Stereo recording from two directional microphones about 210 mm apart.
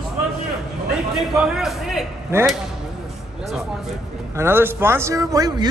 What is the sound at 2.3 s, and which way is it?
Speech, 10° right (ahead or behind).